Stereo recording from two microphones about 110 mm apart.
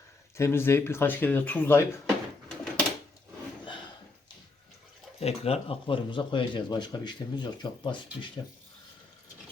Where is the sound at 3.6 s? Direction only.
45° left (ahead or behind).